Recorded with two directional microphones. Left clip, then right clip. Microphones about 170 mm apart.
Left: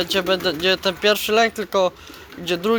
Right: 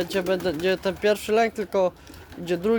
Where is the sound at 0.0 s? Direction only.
15° right (ahead or behind).